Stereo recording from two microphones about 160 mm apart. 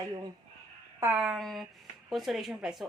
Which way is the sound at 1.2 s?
Centre (ahead or behind).